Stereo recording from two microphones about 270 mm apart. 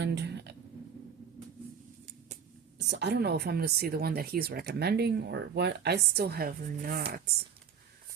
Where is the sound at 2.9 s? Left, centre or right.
Right.